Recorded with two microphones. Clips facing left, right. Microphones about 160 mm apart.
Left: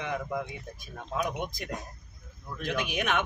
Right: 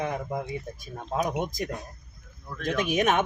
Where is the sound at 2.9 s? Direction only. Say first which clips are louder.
Right 8 dB; 45° right (ahead or behind).